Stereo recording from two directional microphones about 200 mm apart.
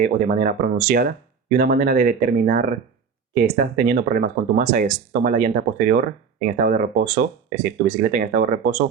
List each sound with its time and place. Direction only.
0.0 s speech: 40° right (ahead or behind)